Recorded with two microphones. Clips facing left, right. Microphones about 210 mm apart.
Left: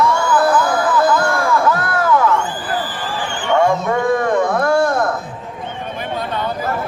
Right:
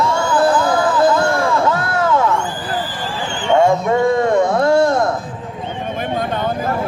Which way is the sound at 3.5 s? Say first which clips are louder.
Right 2 dB; 25° right (ahead or behind).